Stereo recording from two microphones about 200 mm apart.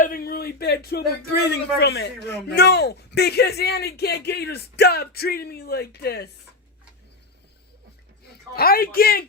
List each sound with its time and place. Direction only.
0.0 s speech: 45° left (ahead or behind)
8.5 s speech: 50° left (ahead or behind)